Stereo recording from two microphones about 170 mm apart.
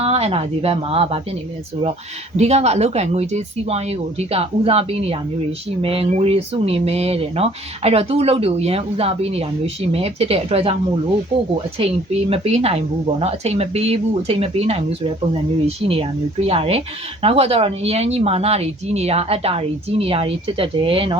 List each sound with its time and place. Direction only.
0.0 s speech: 35° right (ahead or behind)
2.3 s speech: 40° right (ahead or behind)
11.8 s speech: 35° right (ahead or behind)